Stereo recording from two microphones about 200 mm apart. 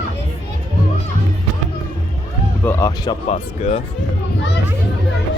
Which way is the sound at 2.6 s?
10° left (ahead or behind).